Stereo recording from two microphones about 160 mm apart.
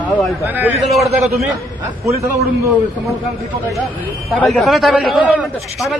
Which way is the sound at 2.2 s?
20° right (ahead or behind).